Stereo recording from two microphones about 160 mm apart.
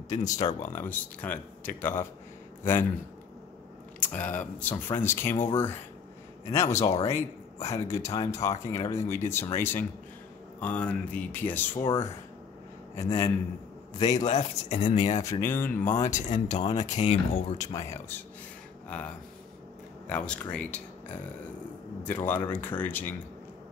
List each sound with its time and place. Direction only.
0.1 s speech: 50° left (ahead or behind)
0.6 s speech: 15° left (ahead or behind)
4.0 s speech: 10° left (ahead or behind)
12.9 s speech: 20° left (ahead or behind)
13.9 s speech: 45° left (ahead or behind)
15.4 s speech: 15° left (ahead or behind)
16.1 s speech: 50° left (ahead or behind)
17.7 s speech: 15° left (ahead or behind)
22.0 s speech: 10° left (ahead or behind)